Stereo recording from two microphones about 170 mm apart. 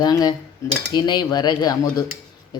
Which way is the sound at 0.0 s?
25° left (ahead or behind).